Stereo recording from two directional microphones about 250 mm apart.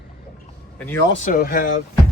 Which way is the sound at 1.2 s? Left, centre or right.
Left.